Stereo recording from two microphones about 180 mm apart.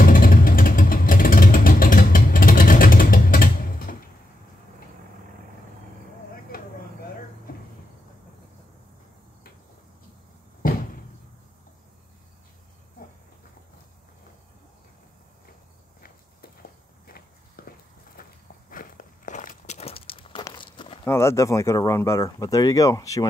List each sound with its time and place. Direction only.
0.0 s vehicle: 50° left (ahead or behind)
17.0 s walk: 55° left (ahead or behind); by 21.0 s 25° left (ahead or behind)
21.0 s speech: 15° left (ahead or behind)